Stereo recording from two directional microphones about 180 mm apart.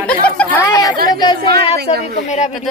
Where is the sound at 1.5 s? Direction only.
65° right (ahead or behind).